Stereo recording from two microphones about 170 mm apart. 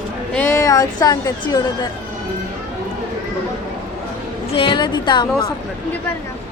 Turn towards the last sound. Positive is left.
turn(degrees=25)  # may be behind; listen again after turning